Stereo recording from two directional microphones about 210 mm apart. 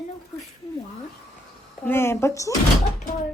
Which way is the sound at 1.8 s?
10° left (ahead or behind).